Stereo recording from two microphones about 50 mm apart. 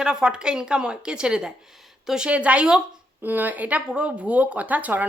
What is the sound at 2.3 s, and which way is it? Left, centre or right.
Speech, right.